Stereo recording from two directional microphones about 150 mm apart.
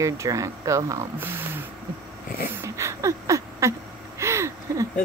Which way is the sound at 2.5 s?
20° right (ahead or behind).